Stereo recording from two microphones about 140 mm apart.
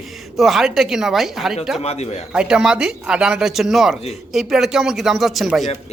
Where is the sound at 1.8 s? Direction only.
50° left (ahead or behind).